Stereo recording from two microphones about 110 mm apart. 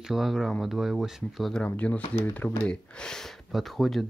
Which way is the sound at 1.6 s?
10° left (ahead or behind).